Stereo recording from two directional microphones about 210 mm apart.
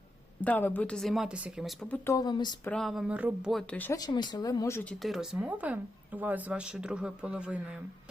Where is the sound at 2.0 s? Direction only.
15° left (ahead or behind).